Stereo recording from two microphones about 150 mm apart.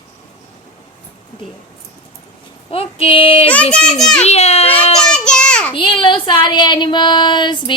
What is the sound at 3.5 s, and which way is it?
Speech, 10° left (ahead or behind).